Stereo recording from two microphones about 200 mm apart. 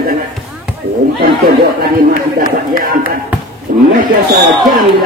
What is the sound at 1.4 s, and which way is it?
Speech, 50° right (ahead or behind).